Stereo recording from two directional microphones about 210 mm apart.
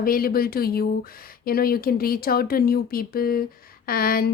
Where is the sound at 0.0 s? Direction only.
45° left (ahead or behind).